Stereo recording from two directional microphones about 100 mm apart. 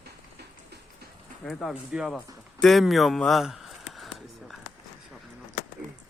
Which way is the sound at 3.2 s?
Centre (ahead or behind).